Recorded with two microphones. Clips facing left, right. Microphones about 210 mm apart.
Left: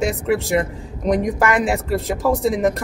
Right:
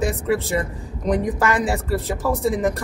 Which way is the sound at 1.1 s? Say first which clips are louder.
Left 2 dB; 15° left (ahead or behind).